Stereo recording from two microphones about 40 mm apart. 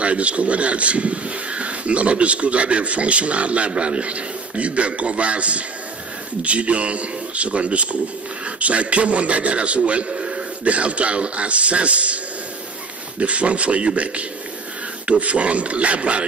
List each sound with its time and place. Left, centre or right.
0.0 s speech: right
13.2 s speech: right